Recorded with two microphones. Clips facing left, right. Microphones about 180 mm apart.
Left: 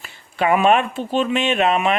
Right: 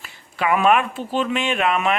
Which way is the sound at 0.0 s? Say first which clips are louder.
Left 3 dB; 30° left (ahead or behind).